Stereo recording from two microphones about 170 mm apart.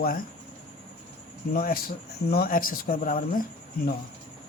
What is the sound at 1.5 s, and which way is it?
Speech, 60° left (ahead or behind).